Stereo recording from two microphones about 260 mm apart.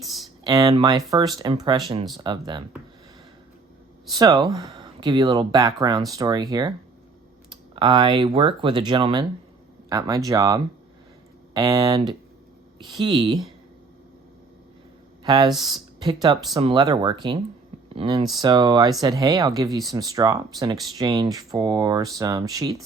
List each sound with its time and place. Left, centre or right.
0.4 s speech: centre
4.1 s speech: centre
15.2 s speech: centre